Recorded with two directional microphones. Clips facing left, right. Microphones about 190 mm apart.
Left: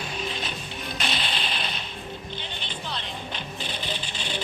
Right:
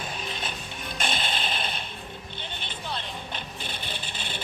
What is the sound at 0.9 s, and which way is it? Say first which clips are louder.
Music: right 1 dB; 50° right (ahead or behind).